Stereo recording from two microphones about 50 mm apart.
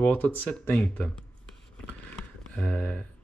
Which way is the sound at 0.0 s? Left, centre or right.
Left.